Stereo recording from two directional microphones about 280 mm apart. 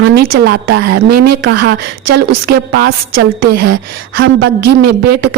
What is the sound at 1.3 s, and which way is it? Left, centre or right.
A woman's voice, right.